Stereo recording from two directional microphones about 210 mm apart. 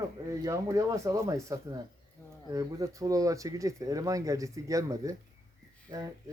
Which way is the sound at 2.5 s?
15° right (ahead or behind).